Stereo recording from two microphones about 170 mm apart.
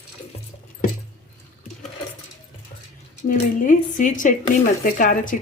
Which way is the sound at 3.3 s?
50° left (ahead or behind).